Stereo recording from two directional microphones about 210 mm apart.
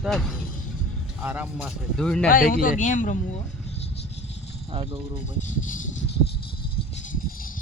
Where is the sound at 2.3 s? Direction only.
40° left (ahead or behind).